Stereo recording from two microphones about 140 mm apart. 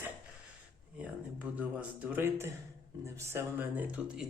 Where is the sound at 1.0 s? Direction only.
10° right (ahead or behind).